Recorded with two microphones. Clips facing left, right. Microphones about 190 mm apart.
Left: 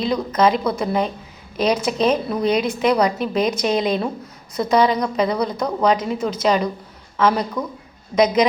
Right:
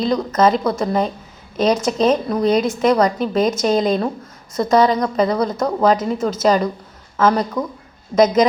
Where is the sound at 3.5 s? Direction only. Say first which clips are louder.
Right 3 dB; 45° right (ahead or behind).